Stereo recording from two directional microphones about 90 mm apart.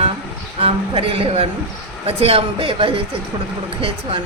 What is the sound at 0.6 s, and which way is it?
A man's voice, 90° right.